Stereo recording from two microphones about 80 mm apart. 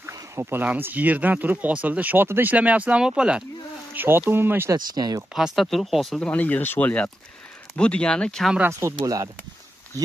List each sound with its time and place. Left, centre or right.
0.4 s speech: right
2.5 s speech: centre
3.9 s a sound: right
4.3 s speech: right
4.7 s speech: right
5.3 s speech: centre
6.1 s speech: centre
8.7 s speech: right